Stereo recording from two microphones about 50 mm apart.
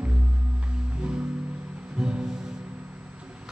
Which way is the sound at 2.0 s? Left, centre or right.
Centre.